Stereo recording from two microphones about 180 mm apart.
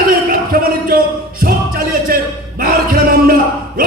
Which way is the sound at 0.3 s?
55° right (ahead or behind).